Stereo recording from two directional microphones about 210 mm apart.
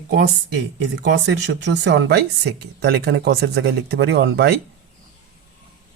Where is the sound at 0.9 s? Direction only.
55° right (ahead or behind).